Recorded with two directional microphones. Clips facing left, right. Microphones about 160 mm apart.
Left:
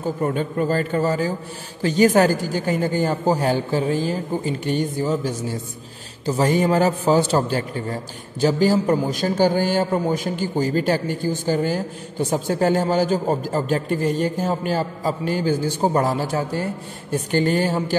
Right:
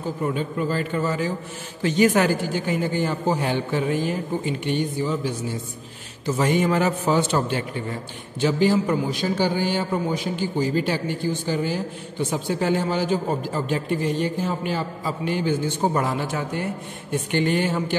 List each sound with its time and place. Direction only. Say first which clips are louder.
0.2 s a man's voice: left 2 dB; 45° left (ahead or behind)